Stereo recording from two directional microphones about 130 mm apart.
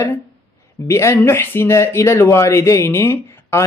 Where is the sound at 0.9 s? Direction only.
20° left (ahead or behind).